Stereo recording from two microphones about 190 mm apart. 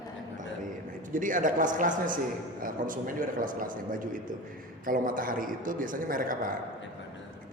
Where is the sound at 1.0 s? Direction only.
45° right (ahead or behind).